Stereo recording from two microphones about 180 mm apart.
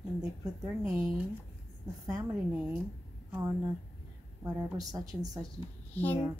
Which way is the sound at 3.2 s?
10° right (ahead or behind).